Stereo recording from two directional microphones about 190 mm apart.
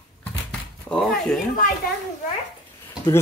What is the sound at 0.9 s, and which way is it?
Speech, 5° left (ahead or behind).